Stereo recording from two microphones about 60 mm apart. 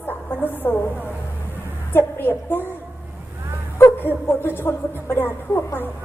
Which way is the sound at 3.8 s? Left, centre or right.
Left.